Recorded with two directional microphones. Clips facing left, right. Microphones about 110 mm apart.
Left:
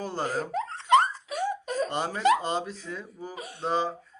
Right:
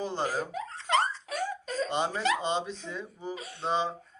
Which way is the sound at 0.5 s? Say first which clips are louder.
Left 6 dB; 65° left (ahead or behind).